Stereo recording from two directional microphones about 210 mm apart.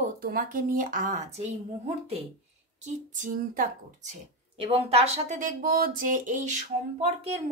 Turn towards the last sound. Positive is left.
turn(degrees=-35)  # may be behind; listen again after turning